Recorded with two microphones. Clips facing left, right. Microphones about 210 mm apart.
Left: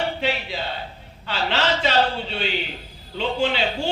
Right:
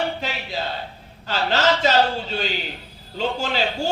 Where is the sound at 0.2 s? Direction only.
40° right (ahead or behind).